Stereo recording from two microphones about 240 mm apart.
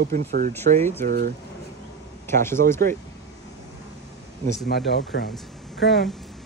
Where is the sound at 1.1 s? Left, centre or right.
Right.